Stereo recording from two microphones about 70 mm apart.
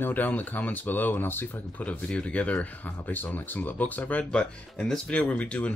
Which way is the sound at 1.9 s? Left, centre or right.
Centre.